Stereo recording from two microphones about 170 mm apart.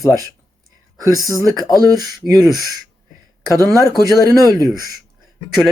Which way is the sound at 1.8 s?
20° right (ahead or behind).